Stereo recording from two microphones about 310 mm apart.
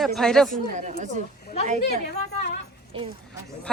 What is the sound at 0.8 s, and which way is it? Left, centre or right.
Speech, right.